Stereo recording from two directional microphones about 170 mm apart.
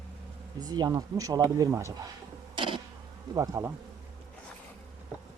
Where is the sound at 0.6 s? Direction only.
20° right (ahead or behind).